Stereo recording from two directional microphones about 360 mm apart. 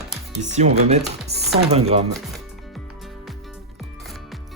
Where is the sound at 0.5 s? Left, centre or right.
Centre.